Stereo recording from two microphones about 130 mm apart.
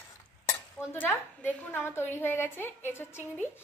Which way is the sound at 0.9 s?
15° left (ahead or behind).